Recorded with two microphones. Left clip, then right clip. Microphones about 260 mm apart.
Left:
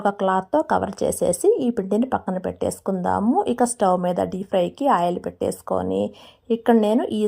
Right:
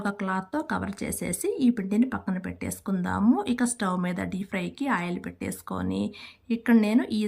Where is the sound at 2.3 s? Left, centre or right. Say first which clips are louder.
Left 10 dB; left.